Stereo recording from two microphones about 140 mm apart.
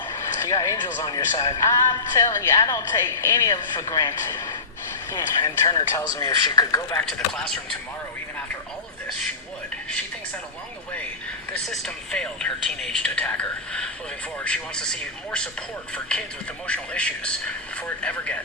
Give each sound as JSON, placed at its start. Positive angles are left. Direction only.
{"t": 0.2, "sound": "a sound", "side_deg": 20}
{"t": 1.0, "sound": "speech", "side_deg": 30}
{"t": 7.3, "sound": "speech", "side_deg": 5}
{"t": 11.5, "sound": "speech", "side_deg": 0}
{"t": 16.6, "sound": "speech", "side_deg": 10}